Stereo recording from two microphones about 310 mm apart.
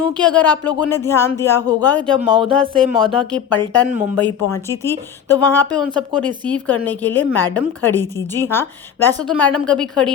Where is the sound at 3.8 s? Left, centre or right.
Centre.